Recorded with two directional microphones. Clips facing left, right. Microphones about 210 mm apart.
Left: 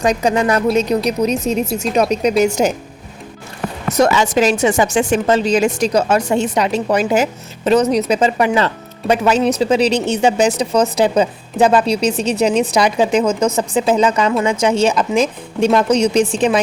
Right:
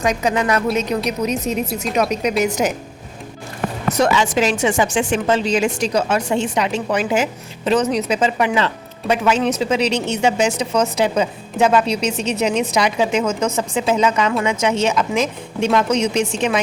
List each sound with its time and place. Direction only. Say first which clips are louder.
0.0 s a woman's voice: left 3 dB; 35° left (ahead or behind)
3.9 s speech: left 4 dB; 40° left (ahead or behind)